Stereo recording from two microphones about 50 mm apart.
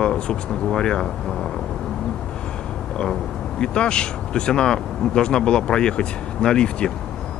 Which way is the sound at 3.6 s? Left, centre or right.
Centre.